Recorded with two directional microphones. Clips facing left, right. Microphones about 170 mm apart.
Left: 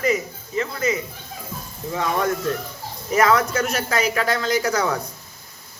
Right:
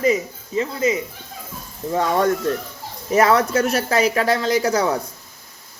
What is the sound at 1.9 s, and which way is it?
Speech, 40° right (ahead or behind).